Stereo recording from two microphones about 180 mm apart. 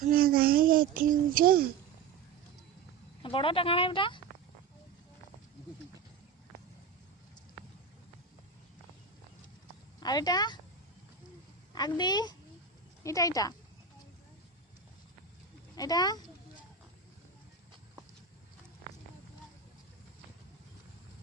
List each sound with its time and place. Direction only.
0.0 s a child's voice: 55° right (ahead or behind)
3.2 s speech: 30° left (ahead or behind)
10.0 s speech: 20° left (ahead or behind)
11.7 s speech: 25° left (ahead or behind)
15.7 s speech: 20° left (ahead or behind)